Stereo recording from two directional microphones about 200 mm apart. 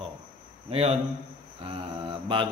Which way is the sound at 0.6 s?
30° right (ahead or behind).